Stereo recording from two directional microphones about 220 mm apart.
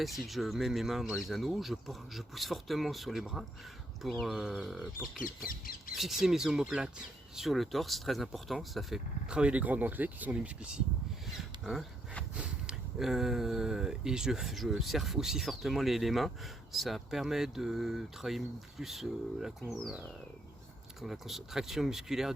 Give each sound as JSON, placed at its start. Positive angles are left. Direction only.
{"t": 0.0, "sound": "speech", "side_deg": 0}
{"t": 5.5, "sound": "speech", "side_deg": 40}
{"t": 6.0, "sound": "speech", "side_deg": 0}
{"t": 21.0, "sound": "speech", "side_deg": 0}